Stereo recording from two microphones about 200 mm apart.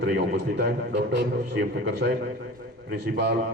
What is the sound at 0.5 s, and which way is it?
A man's voice, 60° right (ahead or behind).